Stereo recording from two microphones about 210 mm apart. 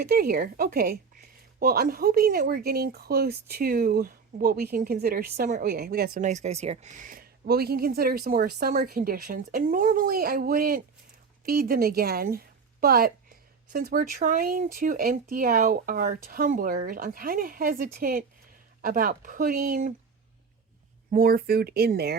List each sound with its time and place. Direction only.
0.0 s a woman's voice: 45° right (ahead or behind)
21.1 s speech: 45° right (ahead or behind)